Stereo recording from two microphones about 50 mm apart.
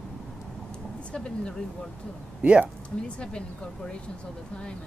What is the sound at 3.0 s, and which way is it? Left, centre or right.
Speech, centre.